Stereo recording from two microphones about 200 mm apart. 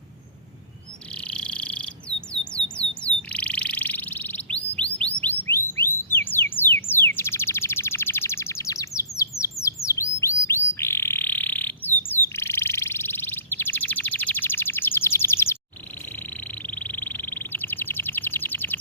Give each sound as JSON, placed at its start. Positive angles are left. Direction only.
{"t": 1.1, "sound": "frog", "side_deg": 5}
{"t": 2.4, "sound": "bird", "side_deg": 5}
{"t": 16.6, "sound": "frog", "side_deg": 10}